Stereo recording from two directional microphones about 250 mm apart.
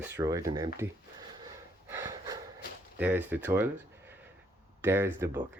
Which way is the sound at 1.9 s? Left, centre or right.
Centre.